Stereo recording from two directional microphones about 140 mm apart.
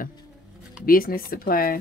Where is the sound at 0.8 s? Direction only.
90° left.